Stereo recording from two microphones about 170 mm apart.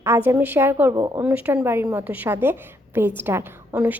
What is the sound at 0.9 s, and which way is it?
Speech, 25° right (ahead or behind).